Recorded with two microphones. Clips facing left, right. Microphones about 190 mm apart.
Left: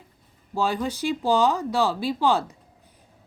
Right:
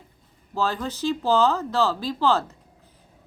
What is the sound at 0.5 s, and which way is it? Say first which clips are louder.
Speech: left 1 dB; 15° left (ahead or behind).